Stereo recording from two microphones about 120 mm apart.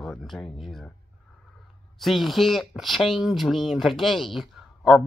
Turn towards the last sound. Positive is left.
turn(degrees=0)  # may be behind; listen again after turning